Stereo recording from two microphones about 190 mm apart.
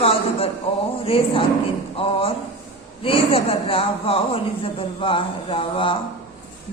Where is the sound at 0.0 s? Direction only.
30° left (ahead or behind).